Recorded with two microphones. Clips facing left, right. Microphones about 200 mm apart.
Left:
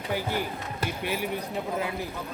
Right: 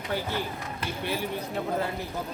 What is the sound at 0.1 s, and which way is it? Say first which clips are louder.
Speech: left 1 dB; 15° left (ahead or behind).